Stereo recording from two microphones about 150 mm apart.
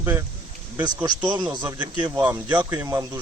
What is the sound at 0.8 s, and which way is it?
Speech, 30° right (ahead or behind).